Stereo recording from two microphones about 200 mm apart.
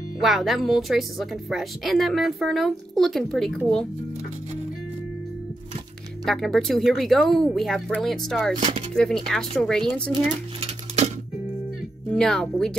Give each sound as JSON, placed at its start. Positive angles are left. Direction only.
{"t": 0.2, "sound": "a woman's voice", "side_deg": 0}
{"t": 6.2, "sound": "a woman's voice", "side_deg": 0}
{"t": 8.5, "sound": "speech", "side_deg": -35}
{"t": 8.9, "sound": "a woman's voice", "side_deg": 5}
{"t": 10.1, "sound": "a child's voice", "side_deg": -30}
{"t": 12.1, "sound": "a woman's voice", "side_deg": 5}